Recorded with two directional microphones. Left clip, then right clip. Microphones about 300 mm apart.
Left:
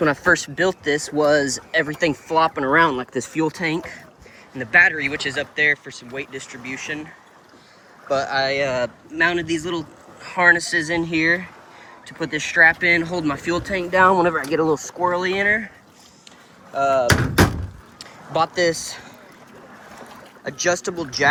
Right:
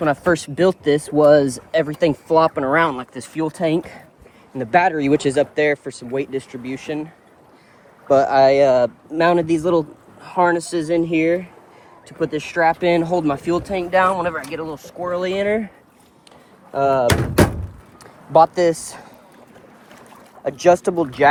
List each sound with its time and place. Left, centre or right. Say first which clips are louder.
0.0 s speech: left 1 dB; centre
8.1 s speech: right 8 dB; centre
12.5 s speech: left 2 dB; centre
15.1 s speech: right 2 dB; centre
16.7 s speech: right 2 dB; right
18.3 s speech: right 6 dB; centre
20.4 s speech: right 7 dB; centre